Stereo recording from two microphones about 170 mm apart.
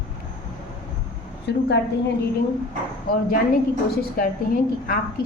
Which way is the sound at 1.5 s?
85° left.